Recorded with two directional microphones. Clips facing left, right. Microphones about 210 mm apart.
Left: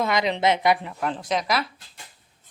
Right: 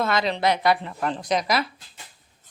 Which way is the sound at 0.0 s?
15° left (ahead or behind).